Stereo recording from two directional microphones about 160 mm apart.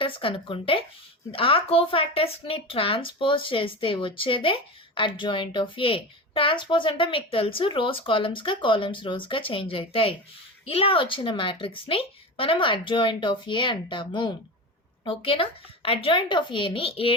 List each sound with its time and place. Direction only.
0.0 s a woman's voice: 35° left (ahead or behind)